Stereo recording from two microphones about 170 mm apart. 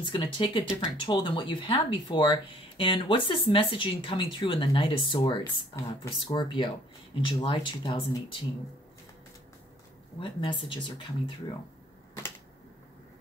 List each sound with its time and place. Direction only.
0.0 s speech: 30° left (ahead or behind)
10.2 s speech: 30° left (ahead or behind)